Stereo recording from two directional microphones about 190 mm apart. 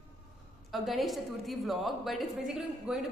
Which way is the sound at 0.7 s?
Centre (ahead or behind).